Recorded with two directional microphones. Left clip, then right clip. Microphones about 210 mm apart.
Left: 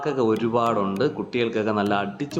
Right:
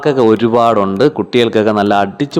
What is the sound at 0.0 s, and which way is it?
Speech, 35° right (ahead or behind).